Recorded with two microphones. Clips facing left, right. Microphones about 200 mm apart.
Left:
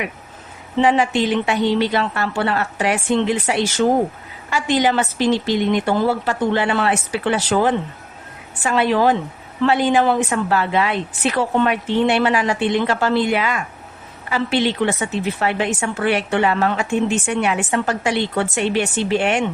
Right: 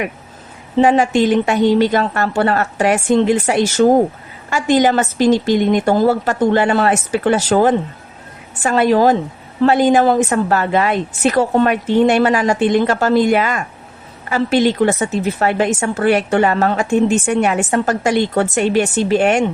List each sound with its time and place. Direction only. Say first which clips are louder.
0.8 s a woman's voice: right 4 dB; 45° right (ahead or behind)